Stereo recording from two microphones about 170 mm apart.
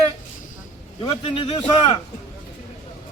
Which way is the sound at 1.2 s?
30° left (ahead or behind).